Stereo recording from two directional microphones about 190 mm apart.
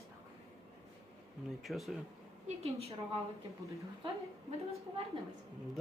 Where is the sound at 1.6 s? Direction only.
Centre (ahead or behind).